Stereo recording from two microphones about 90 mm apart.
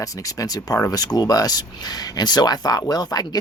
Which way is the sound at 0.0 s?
40° left (ahead or behind).